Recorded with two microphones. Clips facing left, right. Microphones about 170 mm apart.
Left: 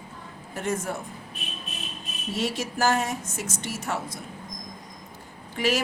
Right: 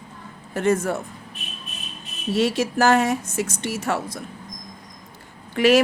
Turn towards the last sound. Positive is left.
turn(degrees=-70)  # may be behind; listen again after turning